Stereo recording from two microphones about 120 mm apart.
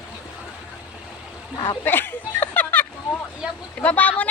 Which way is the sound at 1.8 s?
15° left (ahead or behind).